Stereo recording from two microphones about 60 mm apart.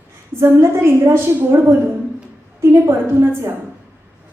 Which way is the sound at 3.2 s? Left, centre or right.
Right.